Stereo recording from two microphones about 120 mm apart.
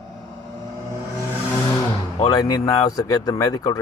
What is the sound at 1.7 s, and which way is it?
Vehicle, 35° left (ahead or behind).